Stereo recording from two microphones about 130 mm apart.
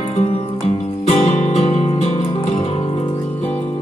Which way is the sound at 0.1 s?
55° left (ahead or behind).